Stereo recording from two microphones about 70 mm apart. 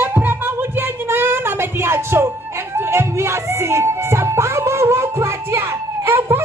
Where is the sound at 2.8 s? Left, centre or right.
Right.